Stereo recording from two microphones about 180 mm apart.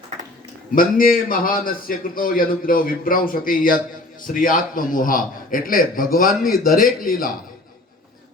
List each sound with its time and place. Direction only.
0.8 s a man's voice: 50° left (ahead or behind)